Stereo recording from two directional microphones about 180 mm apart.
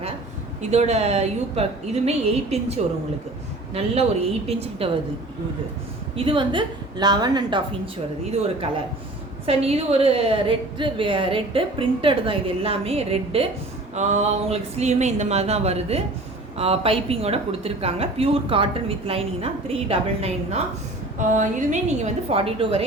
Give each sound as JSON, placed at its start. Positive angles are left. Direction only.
{"t": 0.6, "sound": "a woman's voice", "side_deg": -40}
{"t": 6.1, "sound": "a woman's voice", "side_deg": -30}